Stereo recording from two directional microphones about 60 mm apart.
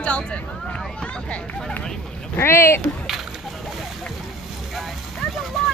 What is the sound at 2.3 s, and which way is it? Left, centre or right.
Speech, left.